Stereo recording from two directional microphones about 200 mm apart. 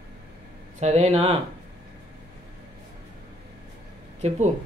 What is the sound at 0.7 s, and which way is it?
Speech, 35° right (ahead or behind).